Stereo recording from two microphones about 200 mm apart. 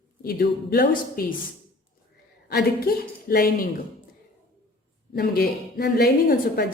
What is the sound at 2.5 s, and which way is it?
A woman's voice, 50° left (ahead or behind).